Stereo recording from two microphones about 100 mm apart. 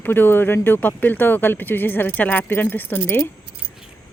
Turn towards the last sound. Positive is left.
turn(degrees=20)  # may be behind; listen again after turning